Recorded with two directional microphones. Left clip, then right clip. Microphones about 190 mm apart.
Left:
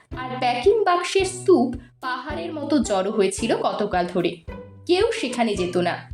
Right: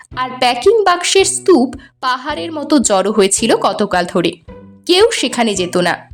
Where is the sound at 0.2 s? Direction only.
45° right (ahead or behind).